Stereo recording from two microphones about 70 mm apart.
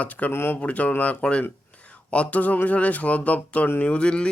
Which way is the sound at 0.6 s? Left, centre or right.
Centre.